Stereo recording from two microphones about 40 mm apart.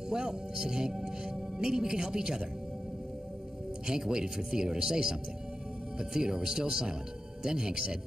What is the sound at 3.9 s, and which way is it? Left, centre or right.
Speech, centre.